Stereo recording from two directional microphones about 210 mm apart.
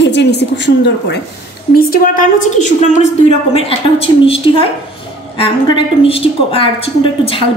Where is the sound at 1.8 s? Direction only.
45° left (ahead or behind).